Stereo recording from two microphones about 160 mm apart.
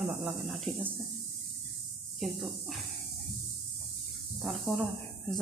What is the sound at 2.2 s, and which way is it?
Speech, centre (ahead or behind).